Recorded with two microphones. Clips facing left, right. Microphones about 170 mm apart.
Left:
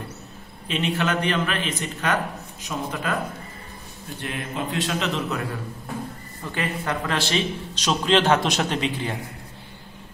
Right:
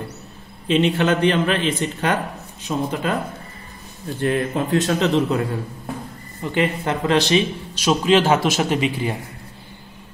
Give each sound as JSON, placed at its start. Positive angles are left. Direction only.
{"t": 0.7, "sound": "speech", "side_deg": -30}
{"t": 4.2, "sound": "a man's voice", "side_deg": -45}
{"t": 5.1, "sound": "a man's voice", "side_deg": -30}